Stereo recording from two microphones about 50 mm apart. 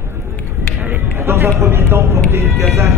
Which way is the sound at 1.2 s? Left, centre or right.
Right.